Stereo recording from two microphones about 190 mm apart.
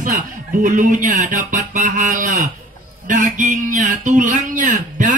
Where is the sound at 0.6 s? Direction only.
45° right (ahead or behind).